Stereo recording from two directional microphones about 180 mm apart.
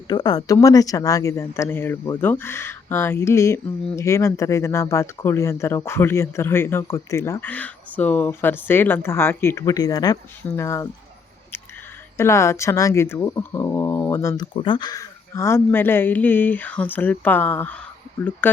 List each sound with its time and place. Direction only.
0.1 s speech: 20° left (ahead or behind)
12.1 s speech: 15° left (ahead or behind)
14.5 s speech: 25° left (ahead or behind); by 18.5 s 10° left (ahead or behind)